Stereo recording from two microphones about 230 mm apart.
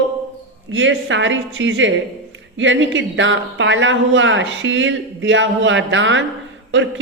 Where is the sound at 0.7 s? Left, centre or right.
Right.